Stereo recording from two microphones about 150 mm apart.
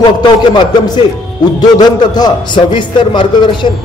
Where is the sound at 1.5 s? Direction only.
25° left (ahead or behind).